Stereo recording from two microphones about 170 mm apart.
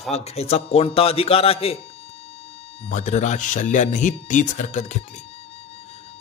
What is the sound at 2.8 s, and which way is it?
Speech, 45° left (ahead or behind).